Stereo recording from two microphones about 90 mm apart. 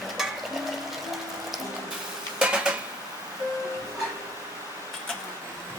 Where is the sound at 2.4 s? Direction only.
10° right (ahead or behind).